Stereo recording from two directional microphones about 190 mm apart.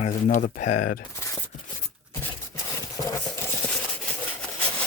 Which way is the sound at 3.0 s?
15° left (ahead or behind).